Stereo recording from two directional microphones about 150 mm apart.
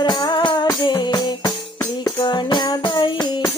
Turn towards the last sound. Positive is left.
turn(degrees=30)  # may be behind; listen again after turning